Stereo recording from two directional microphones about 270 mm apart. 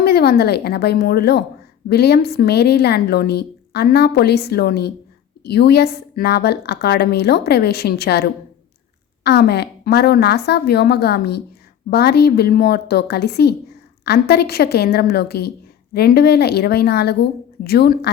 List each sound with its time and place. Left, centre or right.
0.0 s a woman's voice: left